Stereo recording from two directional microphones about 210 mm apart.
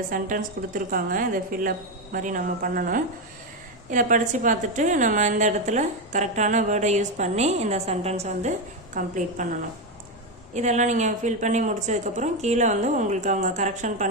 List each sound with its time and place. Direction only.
0.1 s a woman's voice: 40° right (ahead or behind)